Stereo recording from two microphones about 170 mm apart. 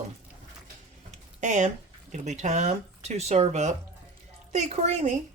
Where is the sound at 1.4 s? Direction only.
45° right (ahead or behind).